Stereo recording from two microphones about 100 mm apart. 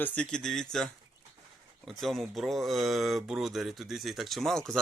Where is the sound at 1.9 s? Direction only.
Centre (ahead or behind).